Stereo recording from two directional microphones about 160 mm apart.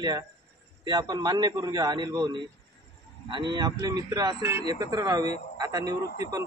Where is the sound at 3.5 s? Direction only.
25° right (ahead or behind).